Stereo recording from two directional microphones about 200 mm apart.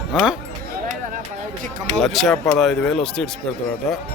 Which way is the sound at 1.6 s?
40° right (ahead or behind).